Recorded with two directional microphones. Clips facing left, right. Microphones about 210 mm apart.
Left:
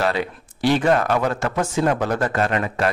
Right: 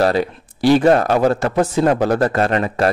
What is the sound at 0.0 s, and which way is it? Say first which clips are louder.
Speech: right 6 dB; 40° right (ahead or behind).